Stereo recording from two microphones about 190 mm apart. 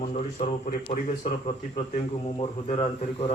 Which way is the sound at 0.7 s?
45° left (ahead or behind).